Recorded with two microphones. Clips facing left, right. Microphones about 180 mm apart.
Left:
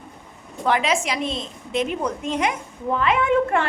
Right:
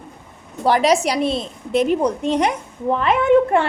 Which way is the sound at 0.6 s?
35° right (ahead or behind).